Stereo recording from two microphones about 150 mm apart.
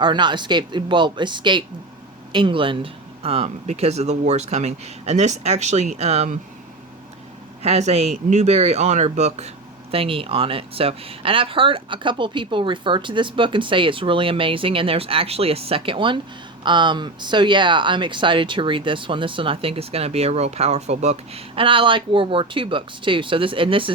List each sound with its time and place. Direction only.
0.0 s speech: 30° right (ahead or behind)
7.6 s speech: 45° right (ahead or behind)